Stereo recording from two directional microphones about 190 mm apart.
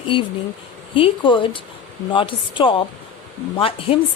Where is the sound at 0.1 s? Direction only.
25° left (ahead or behind).